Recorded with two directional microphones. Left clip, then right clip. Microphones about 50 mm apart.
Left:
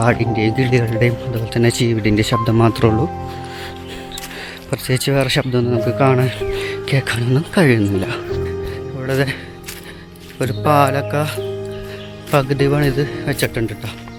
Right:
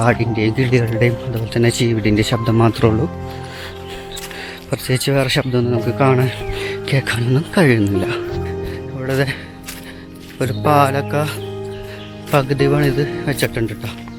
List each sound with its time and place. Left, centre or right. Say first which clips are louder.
0.2 s speech: left 1 dB; left
2.5 s speech: right 1 dB; left
4.7 s speech: even; left
6.0 s speech: right 1 dB; left
7.3 s speech: even; left
9.0 s speech: even; left
12.4 s speech: right 1 dB; centre
13.4 s speech: even; left